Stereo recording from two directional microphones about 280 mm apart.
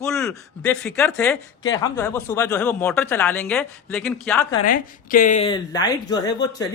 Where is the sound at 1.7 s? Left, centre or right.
Centre.